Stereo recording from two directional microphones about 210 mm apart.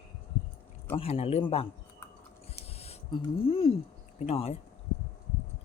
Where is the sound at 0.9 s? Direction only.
25° left (ahead or behind).